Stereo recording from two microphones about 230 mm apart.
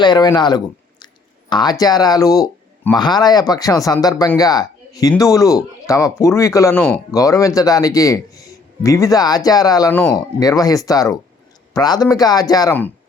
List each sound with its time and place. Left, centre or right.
0.0 s a man's voice: centre